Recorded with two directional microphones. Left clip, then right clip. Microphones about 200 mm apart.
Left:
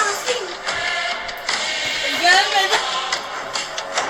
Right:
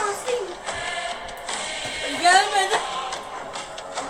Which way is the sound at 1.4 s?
5° left (ahead or behind).